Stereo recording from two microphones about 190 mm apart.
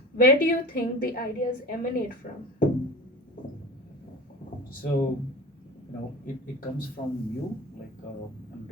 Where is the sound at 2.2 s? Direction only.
50° left (ahead or behind).